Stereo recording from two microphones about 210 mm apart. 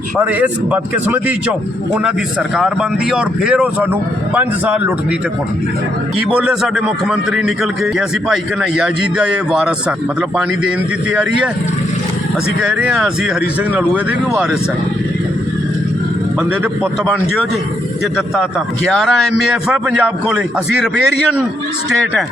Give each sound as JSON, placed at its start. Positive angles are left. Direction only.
{"t": 0.2, "sound": "a man's voice", "side_deg": -5}
{"t": 2.6, "sound": "a man's voice", "side_deg": -5}
{"t": 6.3, "sound": "a man's voice", "side_deg": -5}
{"t": 12.6, "sound": "a man's voice", "side_deg": -5}
{"t": 18.9, "sound": "a man's voice", "side_deg": 0}